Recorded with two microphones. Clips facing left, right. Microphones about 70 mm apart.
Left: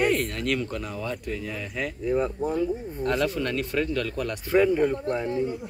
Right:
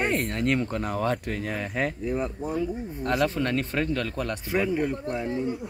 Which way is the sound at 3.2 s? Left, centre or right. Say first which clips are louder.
Right 1 dB; right.